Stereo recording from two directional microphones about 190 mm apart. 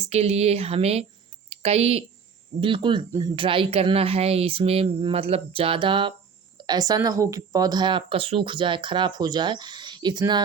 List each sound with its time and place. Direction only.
0.0 s speech: 35° right (ahead or behind)